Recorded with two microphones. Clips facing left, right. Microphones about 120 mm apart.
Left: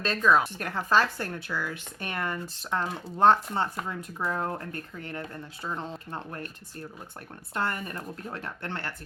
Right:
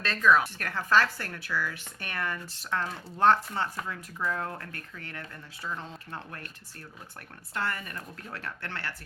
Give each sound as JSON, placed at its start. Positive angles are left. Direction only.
{"t": 0.0, "sound": "speech", "side_deg": 20}